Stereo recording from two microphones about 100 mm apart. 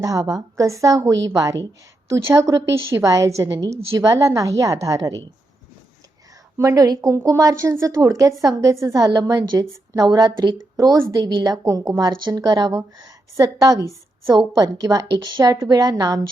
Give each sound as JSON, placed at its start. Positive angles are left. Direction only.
{"t": 0.0, "sound": "a woman's voice", "side_deg": -35}
{"t": 6.6, "sound": "a woman's voice", "side_deg": -35}